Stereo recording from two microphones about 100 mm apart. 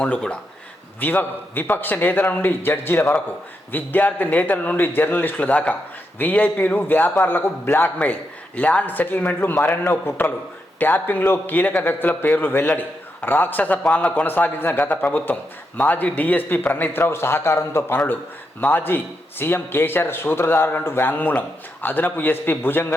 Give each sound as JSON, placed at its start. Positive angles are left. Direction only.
{"t": 0.0, "sound": "a man's voice", "side_deg": 10}